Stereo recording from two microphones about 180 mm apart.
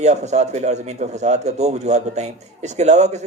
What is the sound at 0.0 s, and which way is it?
A man's voice, 40° right (ahead or behind).